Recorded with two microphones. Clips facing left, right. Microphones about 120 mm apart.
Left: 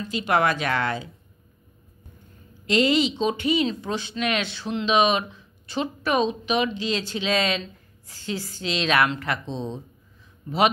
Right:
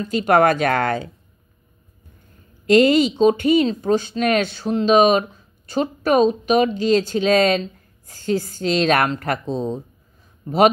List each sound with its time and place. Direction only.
0.0 s speech: 45° right (ahead or behind)
2.6 s speech: 45° right (ahead or behind)
10.4 s a man's voice: 35° right (ahead or behind)